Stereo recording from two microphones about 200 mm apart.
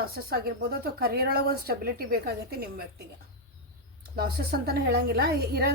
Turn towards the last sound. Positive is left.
turn(degrees=-50)  # may be behind; listen again after turning